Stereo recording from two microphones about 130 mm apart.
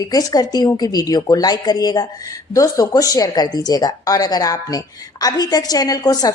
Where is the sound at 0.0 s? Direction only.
30° left (ahead or behind).